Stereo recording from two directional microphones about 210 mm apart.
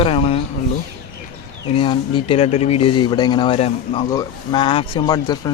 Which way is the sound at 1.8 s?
25° left (ahead or behind).